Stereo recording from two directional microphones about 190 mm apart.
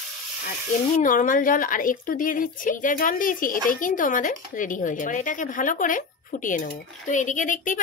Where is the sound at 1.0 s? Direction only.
45° left (ahead or behind).